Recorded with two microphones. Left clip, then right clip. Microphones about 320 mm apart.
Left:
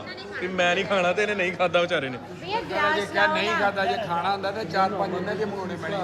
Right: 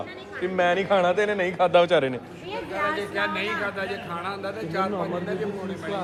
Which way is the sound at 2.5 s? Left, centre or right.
Left.